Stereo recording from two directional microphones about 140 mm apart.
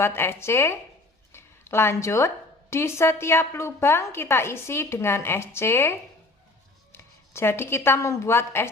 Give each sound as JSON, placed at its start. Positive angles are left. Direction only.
{"t": 0.0, "sound": "a woman's voice", "side_deg": 15}